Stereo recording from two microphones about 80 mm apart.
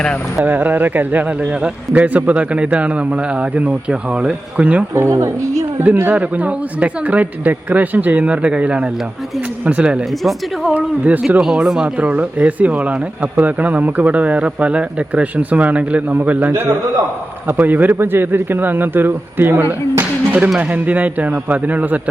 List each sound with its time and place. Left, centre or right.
0.4 s speech: right
4.9 s a woman's voice: right
6.1 s speech: centre
10.1 s speech: centre
10.8 s a man's voice: centre
11.3 s a man's voice: centre; by 19.6 s right
20.0 s music: right
20.6 s a man's voice: centre